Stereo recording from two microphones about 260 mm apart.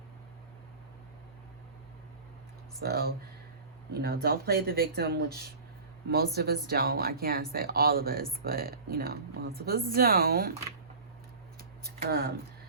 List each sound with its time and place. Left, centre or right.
2.8 s speech: right
12.0 s speech: right